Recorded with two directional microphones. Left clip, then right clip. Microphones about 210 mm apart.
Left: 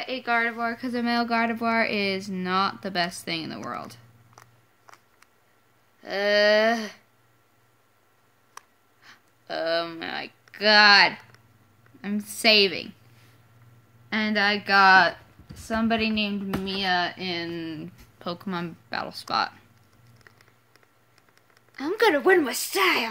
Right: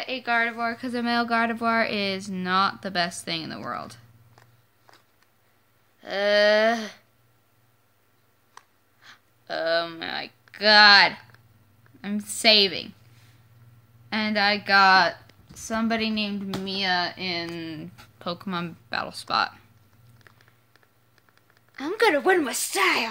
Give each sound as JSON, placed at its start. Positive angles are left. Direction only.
{"t": 0.0, "sound": "speech", "side_deg": 5}
{"t": 5.9, "sound": "speech", "side_deg": 0}
{"t": 9.0, "sound": "speech", "side_deg": 0}
{"t": 14.0, "sound": "a woman's voice", "side_deg": 5}
{"t": 18.2, "sound": "speech", "side_deg": -5}
{"t": 20.3, "sound": "a sound", "side_deg": -5}
{"t": 21.7, "sound": "speech", "side_deg": -5}